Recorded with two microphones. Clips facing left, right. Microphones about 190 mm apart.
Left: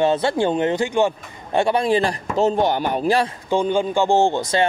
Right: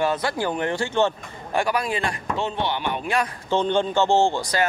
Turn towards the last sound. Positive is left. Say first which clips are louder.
# left 3 dB
turn(degrees=20)  # may be behind; listen again after turning